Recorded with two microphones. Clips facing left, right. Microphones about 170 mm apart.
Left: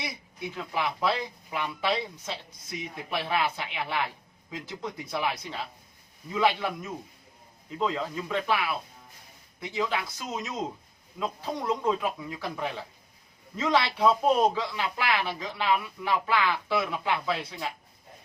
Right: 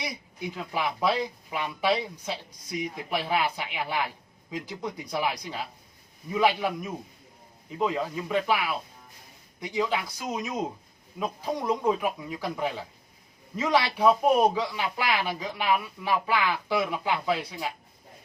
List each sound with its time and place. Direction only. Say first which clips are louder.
0.5 s speech: even; 15° right (ahead or behind)